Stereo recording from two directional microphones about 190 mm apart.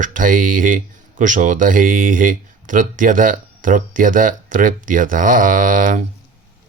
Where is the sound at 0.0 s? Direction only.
45° right (ahead or behind).